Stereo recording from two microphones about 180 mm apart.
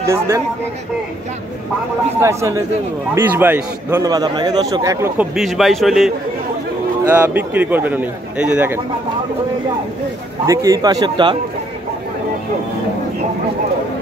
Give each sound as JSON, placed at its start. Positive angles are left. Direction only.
{"t": 0.0, "sound": "a man's voice", "side_deg": -15}
{"t": 2.2, "sound": "a man's voice", "side_deg": -15}
{"t": 7.2, "sound": "a man's voice", "side_deg": -10}
{"t": 10.4, "sound": "a man's voice", "side_deg": -20}